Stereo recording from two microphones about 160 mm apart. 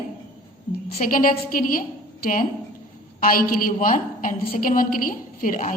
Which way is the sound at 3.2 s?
65° left (ahead or behind).